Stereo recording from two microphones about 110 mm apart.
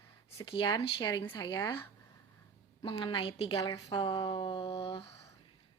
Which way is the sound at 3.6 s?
40° left (ahead or behind).